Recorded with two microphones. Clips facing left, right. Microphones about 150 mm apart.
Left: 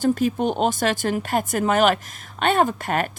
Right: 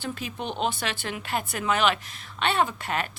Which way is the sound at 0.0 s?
45° left (ahead or behind).